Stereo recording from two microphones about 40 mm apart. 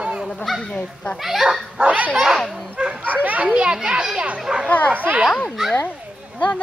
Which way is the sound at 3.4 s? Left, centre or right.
Right.